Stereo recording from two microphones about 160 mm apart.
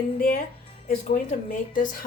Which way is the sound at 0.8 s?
55° left (ahead or behind).